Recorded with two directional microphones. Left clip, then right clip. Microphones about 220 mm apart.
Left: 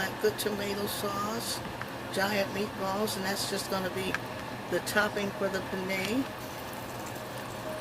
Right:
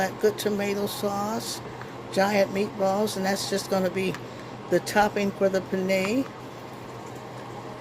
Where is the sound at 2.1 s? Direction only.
35° right (ahead or behind).